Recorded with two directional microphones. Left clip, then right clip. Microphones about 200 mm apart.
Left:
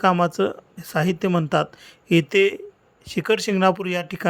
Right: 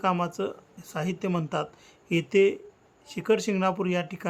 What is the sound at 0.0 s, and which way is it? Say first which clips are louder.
Speech: left 8 dB; 25° left (ahead or behind).